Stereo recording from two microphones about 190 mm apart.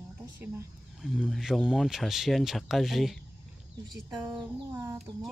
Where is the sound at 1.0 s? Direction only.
Centre (ahead or behind).